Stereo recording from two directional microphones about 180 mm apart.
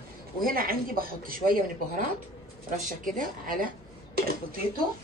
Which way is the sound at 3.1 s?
50° right (ahead or behind).